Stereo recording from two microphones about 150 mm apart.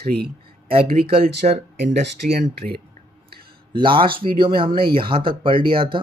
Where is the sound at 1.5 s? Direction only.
45° right (ahead or behind).